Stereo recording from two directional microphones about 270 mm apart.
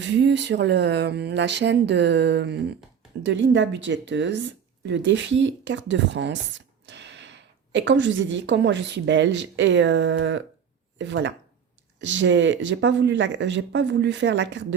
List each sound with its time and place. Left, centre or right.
0.0 s a woman's voice: right